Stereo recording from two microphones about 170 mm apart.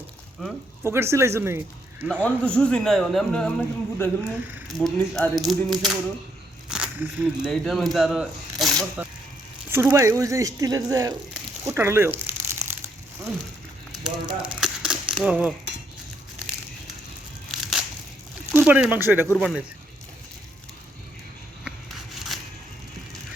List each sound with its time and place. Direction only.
0.9 s speech: 15° right (ahead or behind)
2.2 s a man's voice: 5° left (ahead or behind)
4.8 s a man's voice: centre (ahead or behind)
9.7 s a woman's voice: 15° right (ahead or behind)
12.2 s crumpling: 15° right (ahead or behind)
14.0 s speech: 5° right (ahead or behind)
17.5 s crushing: centre (ahead or behind)
18.5 s speech: 10° right (ahead or behind)
19.4 s a man's voice: centre (ahead or behind)
22.1 s a sound: centre (ahead or behind)